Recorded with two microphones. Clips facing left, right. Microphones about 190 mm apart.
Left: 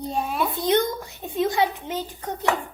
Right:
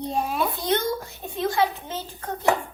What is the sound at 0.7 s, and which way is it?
A child's voice, 15° left (ahead or behind).